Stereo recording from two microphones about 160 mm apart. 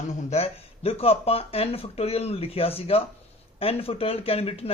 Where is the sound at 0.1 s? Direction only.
45° left (ahead or behind).